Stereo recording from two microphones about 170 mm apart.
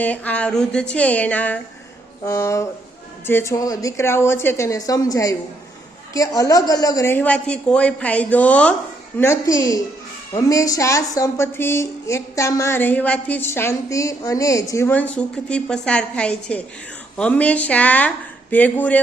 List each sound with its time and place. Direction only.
0.0 s a woman's voice: 10° left (ahead or behind)